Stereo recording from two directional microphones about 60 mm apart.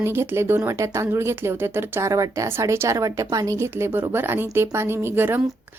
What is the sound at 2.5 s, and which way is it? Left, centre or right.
A woman's voice, right.